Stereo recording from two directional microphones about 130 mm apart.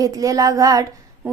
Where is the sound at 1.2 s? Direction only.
15° right (ahead or behind).